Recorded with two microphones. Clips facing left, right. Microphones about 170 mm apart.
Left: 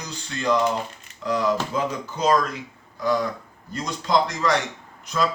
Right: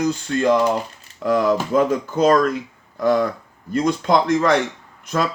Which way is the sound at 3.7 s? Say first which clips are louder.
Right 5 dB; 55° right (ahead or behind).